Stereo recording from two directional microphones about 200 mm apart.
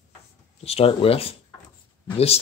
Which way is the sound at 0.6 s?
30° left (ahead or behind).